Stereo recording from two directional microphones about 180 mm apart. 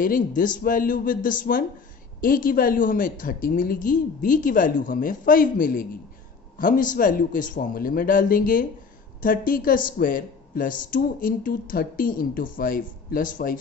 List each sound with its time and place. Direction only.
0.0 s speech: 50° left (ahead or behind)